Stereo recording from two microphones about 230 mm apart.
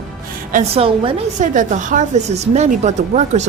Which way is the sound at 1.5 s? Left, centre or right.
Right.